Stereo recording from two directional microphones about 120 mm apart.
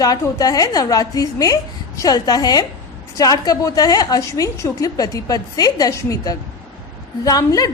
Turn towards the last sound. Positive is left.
turn(degrees=30)  # may be behind; listen again after turning